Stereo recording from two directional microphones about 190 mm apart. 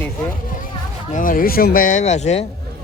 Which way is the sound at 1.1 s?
45° left (ahead or behind).